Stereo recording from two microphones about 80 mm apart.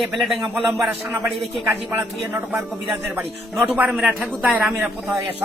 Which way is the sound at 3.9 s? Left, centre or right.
Centre.